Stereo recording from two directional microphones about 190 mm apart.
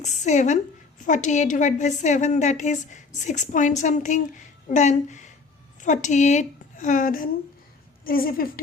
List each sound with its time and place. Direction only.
0.0 s a woman's voice: 40° left (ahead or behind)